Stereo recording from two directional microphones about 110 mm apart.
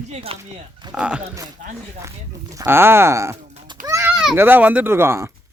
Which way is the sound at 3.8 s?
30° right (ahead or behind).